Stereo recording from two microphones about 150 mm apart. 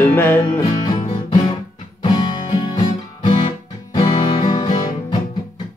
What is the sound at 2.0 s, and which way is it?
Music, 30° left (ahead or behind).